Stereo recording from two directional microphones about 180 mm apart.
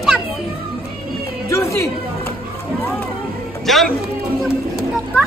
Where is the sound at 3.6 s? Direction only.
Centre (ahead or behind).